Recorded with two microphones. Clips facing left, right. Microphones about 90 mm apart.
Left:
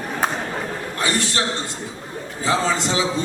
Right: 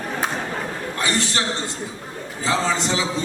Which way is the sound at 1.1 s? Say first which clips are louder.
Left 1 dB; 20° right (ahead or behind).